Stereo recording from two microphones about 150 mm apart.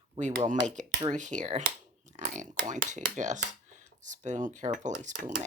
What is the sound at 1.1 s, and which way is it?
Speech, 55° right (ahead or behind).